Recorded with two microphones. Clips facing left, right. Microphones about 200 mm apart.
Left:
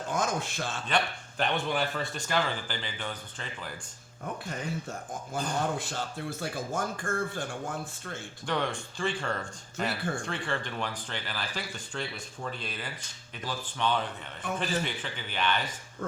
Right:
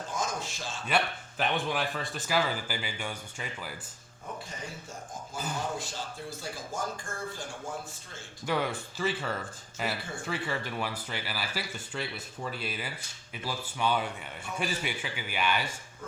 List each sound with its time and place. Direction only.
0.1 s speech: 55° left (ahead or behind)
0.9 s speech: 5° right (ahead or behind)
4.4 s speech: 60° left (ahead or behind)
8.4 s speech: 5° right (ahead or behind)